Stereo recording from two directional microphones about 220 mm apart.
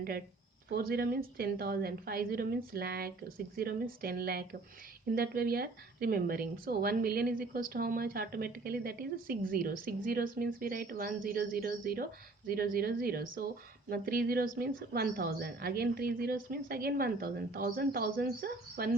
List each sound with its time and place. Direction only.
0.7 s a woman's voice: 45° right (ahead or behind)